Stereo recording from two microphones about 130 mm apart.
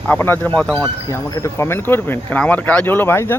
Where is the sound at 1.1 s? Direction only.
25° left (ahead or behind).